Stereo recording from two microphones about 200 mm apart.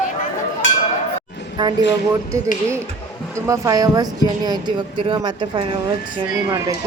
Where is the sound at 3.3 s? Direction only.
15° right (ahead or behind).